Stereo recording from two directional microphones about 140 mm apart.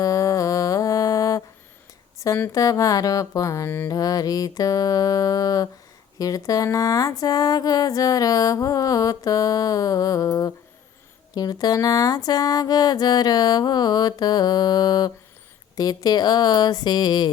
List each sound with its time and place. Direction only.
0.0 s mantra: 25° left (ahead or behind)
2.2 s speech: 20° left (ahead or behind)